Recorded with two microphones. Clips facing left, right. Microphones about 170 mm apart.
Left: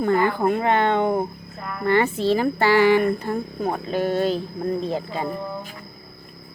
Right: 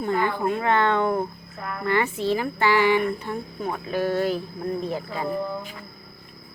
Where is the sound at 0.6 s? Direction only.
20° left (ahead or behind); by 3.9 s 40° left (ahead or behind).